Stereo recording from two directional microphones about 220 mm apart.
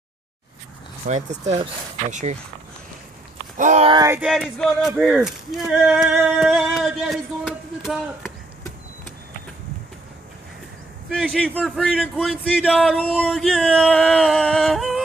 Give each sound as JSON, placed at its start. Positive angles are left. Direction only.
{"t": 1.0, "sound": "speech", "side_deg": -30}
{"t": 3.5, "sound": "speech", "side_deg": -35}
{"t": 3.9, "sound": "speech", "side_deg": -10}
{"t": 11.1, "sound": "speech", "side_deg": 0}